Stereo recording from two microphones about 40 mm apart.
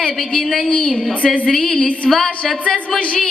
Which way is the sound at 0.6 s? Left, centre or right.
Left.